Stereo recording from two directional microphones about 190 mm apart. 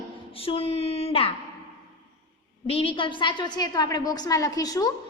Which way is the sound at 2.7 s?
30° left (ahead or behind).